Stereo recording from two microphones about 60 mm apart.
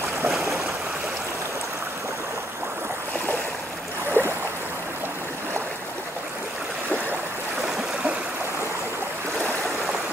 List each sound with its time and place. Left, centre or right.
0.3 s stream: centre
4.2 s boat: left
7.6 s stream: centre